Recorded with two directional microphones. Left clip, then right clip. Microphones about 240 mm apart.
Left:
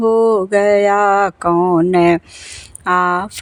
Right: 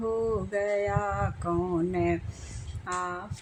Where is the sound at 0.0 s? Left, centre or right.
Left.